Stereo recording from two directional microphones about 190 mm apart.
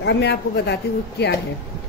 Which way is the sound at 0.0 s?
65° left (ahead or behind).